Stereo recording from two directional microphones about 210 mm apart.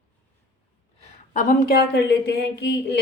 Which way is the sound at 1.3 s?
40° left (ahead or behind).